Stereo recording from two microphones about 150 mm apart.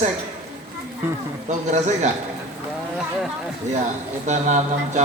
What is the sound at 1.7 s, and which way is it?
Speech, 50° right (ahead or behind).